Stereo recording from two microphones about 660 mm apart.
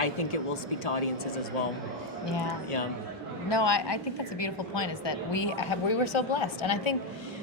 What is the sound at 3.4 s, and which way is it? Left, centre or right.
A woman's voice, left.